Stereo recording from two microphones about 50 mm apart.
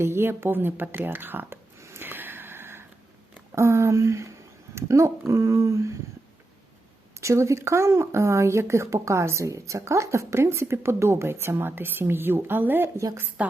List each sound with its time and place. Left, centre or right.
0.0 s speech: right
1.8 s a sound: right
3.5 s speech: right
5.3 s speech: right
7.2 s speech: right
13.4 s a woman's voice: right